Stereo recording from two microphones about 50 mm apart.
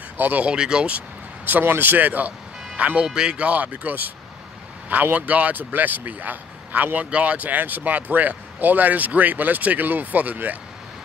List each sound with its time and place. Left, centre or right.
0.2 s speech: right
0.5 s speech: centre
0.9 s speech: right
5.1 s speech: right